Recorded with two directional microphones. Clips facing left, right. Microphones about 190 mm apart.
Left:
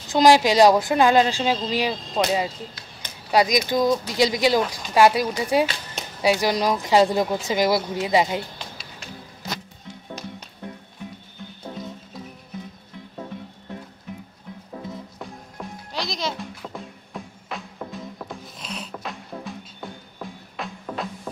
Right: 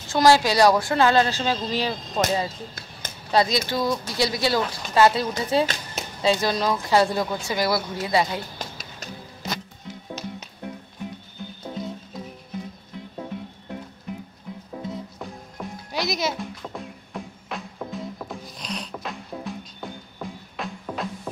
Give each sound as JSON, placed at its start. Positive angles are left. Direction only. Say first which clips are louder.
{"t": 0.1, "sound": "speech", "louder": "left 2 dB", "side_deg": 15}
{"t": 8.5, "sound": "a sound", "louder": "right 3 dB", "side_deg": -45}
{"t": 9.4, "sound": "music", "louder": "right 2 dB", "side_deg": -20}
{"t": 15.9, "sound": "music", "louder": "right 3 dB", "side_deg": -10}